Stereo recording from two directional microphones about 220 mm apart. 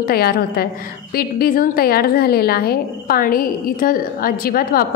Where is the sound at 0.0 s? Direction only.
45° left (ahead or behind).